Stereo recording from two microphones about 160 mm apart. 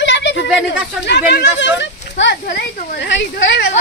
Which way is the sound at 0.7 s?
90° left.